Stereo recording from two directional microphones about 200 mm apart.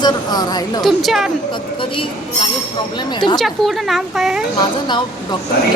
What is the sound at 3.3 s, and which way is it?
A woman's voice, centre (ahead or behind).